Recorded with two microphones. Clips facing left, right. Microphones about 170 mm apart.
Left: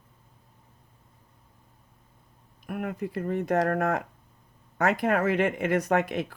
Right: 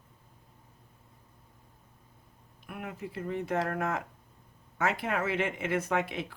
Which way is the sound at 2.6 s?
50° left (ahead or behind).